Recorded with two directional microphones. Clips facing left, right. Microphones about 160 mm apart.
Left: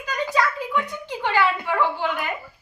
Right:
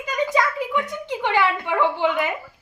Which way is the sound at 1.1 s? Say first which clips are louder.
Right 1 dB; 20° right (ahead or behind).